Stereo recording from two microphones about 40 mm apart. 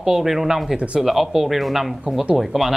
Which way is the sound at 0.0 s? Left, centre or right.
Centre.